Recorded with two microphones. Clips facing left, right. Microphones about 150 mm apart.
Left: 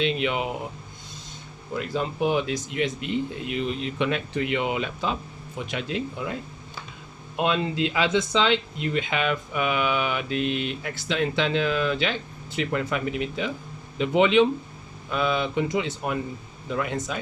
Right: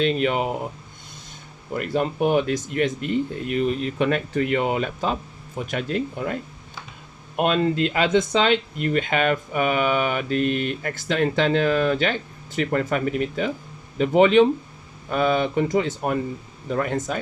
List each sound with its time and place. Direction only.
0.0 s speech: 45° right (ahead or behind)
1.7 s speech: 60° right (ahead or behind)
7.3 s speech: 55° right (ahead or behind)